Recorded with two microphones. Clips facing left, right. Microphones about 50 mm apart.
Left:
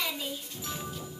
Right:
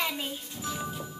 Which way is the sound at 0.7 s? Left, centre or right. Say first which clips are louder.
Right 4 dB; centre.